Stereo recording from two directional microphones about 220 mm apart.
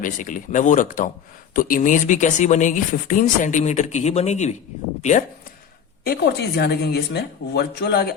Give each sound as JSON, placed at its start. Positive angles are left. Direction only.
{"t": 0.0, "sound": "speech", "side_deg": 35}
{"t": 6.1, "sound": "speech", "side_deg": 50}